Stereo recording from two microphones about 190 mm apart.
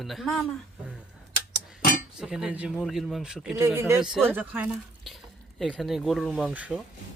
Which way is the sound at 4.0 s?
5° right (ahead or behind).